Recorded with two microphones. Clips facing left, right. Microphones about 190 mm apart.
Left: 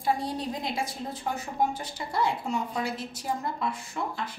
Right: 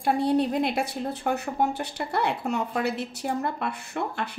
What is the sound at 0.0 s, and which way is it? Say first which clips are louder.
A woman's voice: right 6 dB; 65° right (ahead or behind).